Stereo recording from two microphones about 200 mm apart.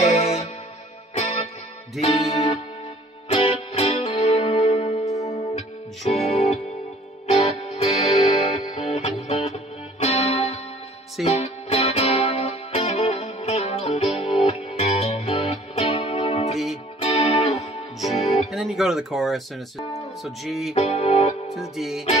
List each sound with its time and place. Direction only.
0.0 s music: 30° left (ahead or behind)
18.5 s a sound: centre (ahead or behind)
20.2 s music: centre (ahead or behind)
20.7 s music: 30° left (ahead or behind)
21.5 s music: centre (ahead or behind)